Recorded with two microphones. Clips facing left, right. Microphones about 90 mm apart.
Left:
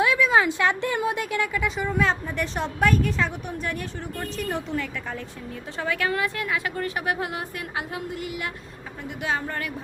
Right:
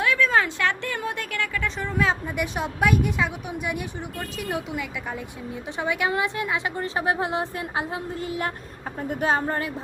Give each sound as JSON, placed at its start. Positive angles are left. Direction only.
{"t": 0.0, "sound": "a woman's voice", "side_deg": 15}
{"t": 2.3, "sound": "a woman's voice", "side_deg": -10}